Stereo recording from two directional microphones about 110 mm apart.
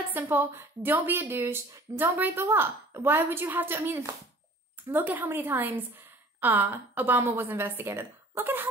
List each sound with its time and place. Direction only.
0.1 s speech: 20° right (ahead or behind)